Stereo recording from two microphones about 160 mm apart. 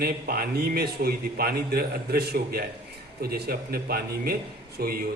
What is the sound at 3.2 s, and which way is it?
A man's voice, 85° right.